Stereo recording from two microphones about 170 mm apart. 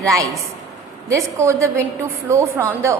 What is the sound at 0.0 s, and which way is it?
A woman's voice, 20° right (ahead or behind).